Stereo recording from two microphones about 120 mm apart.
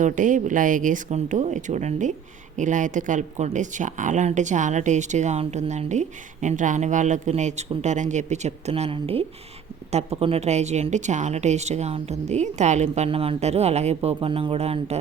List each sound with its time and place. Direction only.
0.0 s speech: 90° right; by 14.9 s 60° right (ahead or behind)